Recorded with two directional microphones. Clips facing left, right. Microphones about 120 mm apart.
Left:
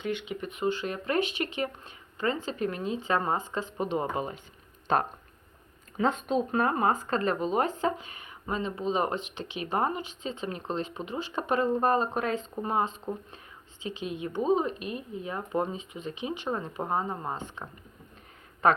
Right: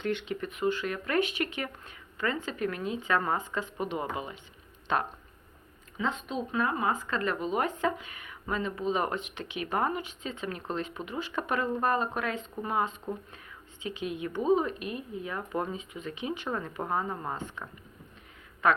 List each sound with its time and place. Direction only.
0.0 s speech: 10° left (ahead or behind); by 17.7 s 25° left (ahead or behind)
18.6 s speech: 35° left (ahead or behind)